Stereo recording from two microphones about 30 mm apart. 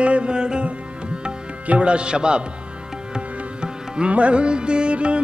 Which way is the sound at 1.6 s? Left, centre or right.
Right.